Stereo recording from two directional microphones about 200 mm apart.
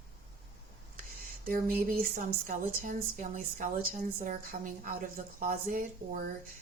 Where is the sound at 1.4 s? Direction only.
45° right (ahead or behind).